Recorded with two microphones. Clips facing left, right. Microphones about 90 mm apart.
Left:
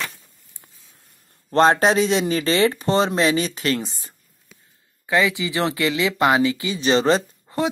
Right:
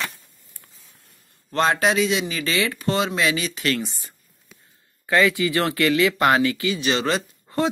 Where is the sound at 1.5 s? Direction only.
35° left (ahead or behind).